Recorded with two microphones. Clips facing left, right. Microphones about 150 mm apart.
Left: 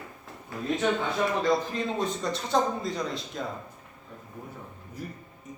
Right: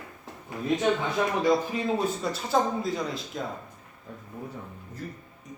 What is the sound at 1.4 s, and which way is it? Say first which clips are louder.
A man's voice: right 2 dB; 10° right (ahead or behind).